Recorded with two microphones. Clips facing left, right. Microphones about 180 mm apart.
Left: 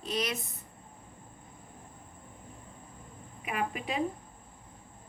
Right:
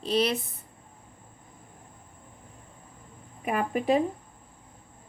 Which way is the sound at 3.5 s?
45° right (ahead or behind).